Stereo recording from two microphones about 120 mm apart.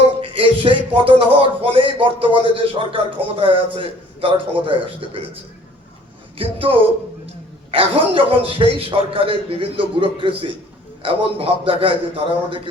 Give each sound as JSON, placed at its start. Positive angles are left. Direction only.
{"t": 0.2, "sound": "speech", "side_deg": -50}